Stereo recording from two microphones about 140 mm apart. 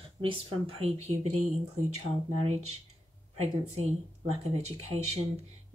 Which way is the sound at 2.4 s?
50° right (ahead or behind).